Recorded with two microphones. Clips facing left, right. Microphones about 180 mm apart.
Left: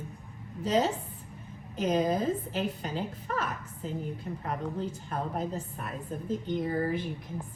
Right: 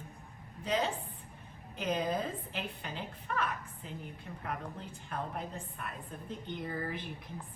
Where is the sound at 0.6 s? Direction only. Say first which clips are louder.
Left 6 dB; 35° left (ahead or behind).